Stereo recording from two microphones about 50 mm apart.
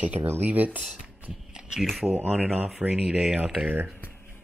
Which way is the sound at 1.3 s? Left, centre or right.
Centre.